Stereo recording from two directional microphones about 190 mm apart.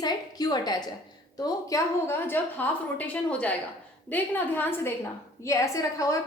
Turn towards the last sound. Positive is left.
turn(degrees=15)  # may be behind; listen again after turning